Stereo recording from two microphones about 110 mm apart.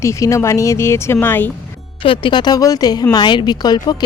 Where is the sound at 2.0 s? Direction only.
50° left (ahead or behind).